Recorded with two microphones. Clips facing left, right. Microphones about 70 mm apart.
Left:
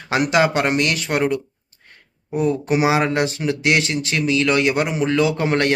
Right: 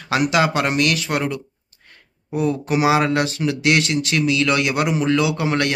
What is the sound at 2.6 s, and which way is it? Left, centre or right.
A man's voice, left.